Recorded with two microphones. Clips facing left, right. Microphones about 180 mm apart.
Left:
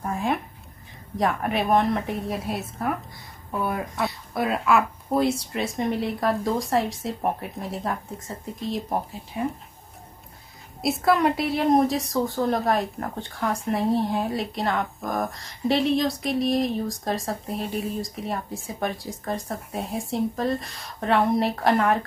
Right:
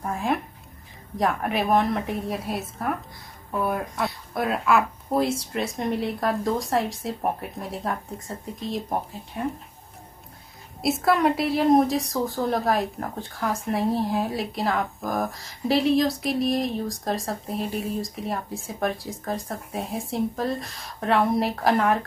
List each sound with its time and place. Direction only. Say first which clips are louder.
0.0 s a sound: even; centre (ahead or behind)
1.1 s a woman's voice: even; centre (ahead or behind)
10.8 s a woman's voice: even; centre (ahead or behind)